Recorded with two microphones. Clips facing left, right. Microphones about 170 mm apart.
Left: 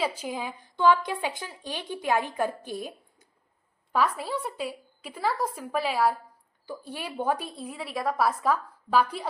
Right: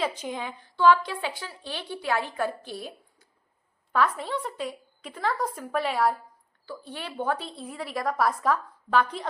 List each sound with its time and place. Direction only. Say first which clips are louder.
0.0 s a woman's voice: even; 5° left (ahead or behind)